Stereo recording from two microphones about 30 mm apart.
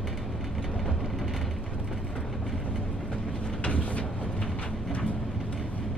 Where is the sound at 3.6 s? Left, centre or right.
Left.